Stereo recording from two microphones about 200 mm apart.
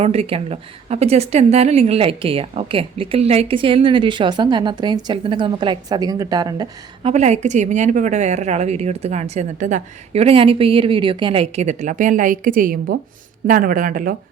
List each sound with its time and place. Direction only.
0.0 s a woman's voice: 30° right (ahead or behind)
7.1 s a woman's voice: 35° right (ahead or behind)